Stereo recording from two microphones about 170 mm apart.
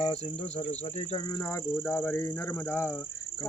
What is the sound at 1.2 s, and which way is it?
Speech, 20° left (ahead or behind).